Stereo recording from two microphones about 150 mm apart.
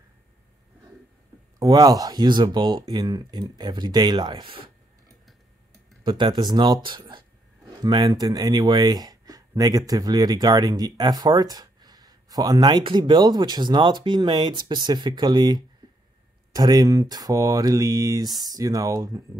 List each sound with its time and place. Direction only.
1.6 s speech: 25° right (ahead or behind)
6.0 s speech: 35° right (ahead or behind)
15.8 s a sound: 25° right (ahead or behind)
16.5 s speech: 25° right (ahead or behind)